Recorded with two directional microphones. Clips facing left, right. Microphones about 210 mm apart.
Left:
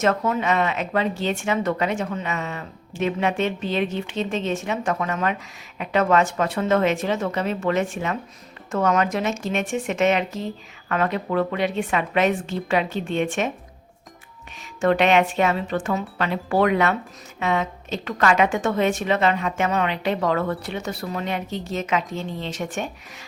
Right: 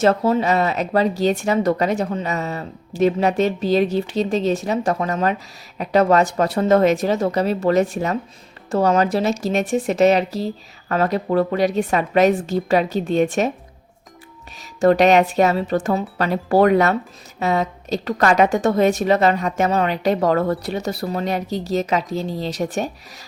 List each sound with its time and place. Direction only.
0.0 s speech: 35° right (ahead or behind)
14.8 s speech: 40° right (ahead or behind)